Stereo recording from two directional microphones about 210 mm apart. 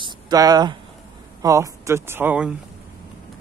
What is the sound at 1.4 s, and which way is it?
Speech, 15° right (ahead or behind).